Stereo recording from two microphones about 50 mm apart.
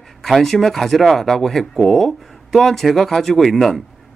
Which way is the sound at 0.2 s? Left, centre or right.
Centre.